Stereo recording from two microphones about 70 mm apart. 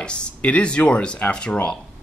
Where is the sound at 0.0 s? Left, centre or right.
Centre.